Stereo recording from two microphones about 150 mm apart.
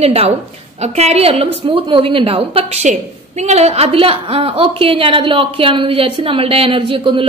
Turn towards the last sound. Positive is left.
turn(degrees=-35)  # may be behind; listen again after turning